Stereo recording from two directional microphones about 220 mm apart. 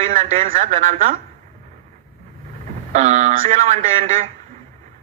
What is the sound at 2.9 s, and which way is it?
Speech, 30° right (ahead or behind).